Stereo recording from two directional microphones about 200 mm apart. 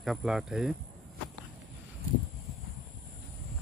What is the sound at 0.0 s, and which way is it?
Speech, centre (ahead or behind).